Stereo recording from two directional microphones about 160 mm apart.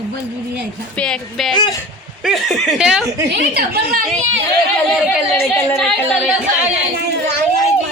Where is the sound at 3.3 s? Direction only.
85° right.